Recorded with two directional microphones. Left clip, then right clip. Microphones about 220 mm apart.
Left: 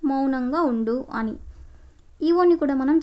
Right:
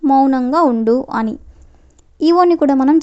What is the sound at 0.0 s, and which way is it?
A woman's voice, 25° right (ahead or behind).